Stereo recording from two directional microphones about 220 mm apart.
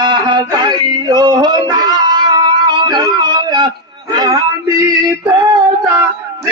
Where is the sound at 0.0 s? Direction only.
20° right (ahead or behind).